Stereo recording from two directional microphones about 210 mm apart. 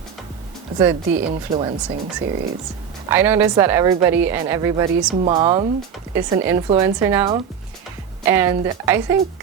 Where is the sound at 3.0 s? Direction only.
10° right (ahead or behind).